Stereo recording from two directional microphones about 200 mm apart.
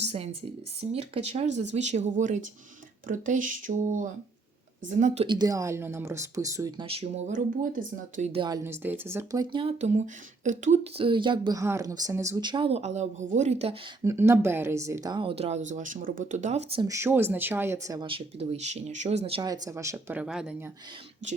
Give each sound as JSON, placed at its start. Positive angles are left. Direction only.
{"t": 0.0, "sound": "a sound", "side_deg": -30}
{"t": 0.8, "sound": "speech", "side_deg": -30}
{"t": 5.2, "sound": "speech", "side_deg": -20}
{"t": 14.0, "sound": "speech", "side_deg": -15}
{"t": 16.8, "sound": "speech", "side_deg": -15}
{"t": 21.2, "sound": "speech", "side_deg": -35}